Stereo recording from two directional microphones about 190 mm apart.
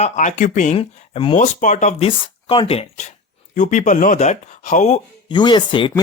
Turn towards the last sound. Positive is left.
turn(degrees=25)  # may be behind; listen again after turning